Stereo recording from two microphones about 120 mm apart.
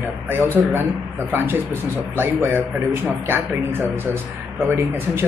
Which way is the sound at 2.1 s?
20° right (ahead or behind).